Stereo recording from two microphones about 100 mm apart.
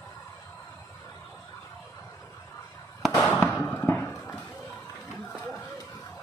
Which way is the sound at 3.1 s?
20° left (ahead or behind).